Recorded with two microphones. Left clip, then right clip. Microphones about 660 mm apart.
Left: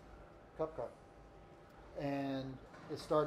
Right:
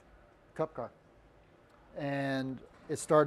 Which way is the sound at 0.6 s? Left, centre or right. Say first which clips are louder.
Right 5 dB; right.